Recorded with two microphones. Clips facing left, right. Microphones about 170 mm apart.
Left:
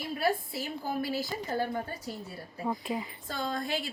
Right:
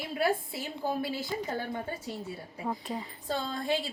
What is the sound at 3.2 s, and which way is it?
Speech, 30° right (ahead or behind).